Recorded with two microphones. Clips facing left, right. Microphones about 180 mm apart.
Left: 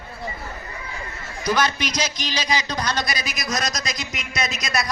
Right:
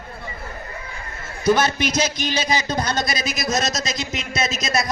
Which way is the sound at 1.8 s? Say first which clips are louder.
Right 5 dB; 50° right (ahead or behind).